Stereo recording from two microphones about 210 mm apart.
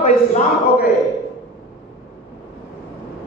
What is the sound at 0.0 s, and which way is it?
Speech, 35° left (ahead or behind).